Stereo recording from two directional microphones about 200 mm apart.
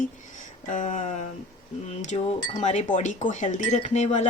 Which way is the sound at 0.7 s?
40° left (ahead or behind).